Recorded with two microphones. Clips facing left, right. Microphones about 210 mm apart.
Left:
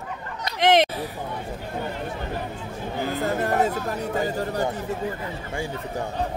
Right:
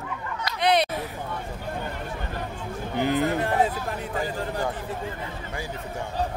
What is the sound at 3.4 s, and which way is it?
Speech, 45° left (ahead or behind).